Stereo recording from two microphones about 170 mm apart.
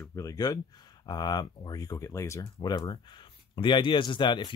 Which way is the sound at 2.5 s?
30° left (ahead or behind).